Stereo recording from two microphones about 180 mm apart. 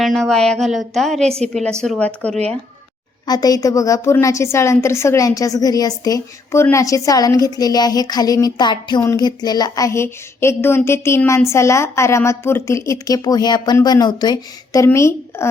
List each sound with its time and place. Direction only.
0.0 s a woman's voice: centre (ahead or behind)
3.2 s a woman's voice: 20° left (ahead or behind)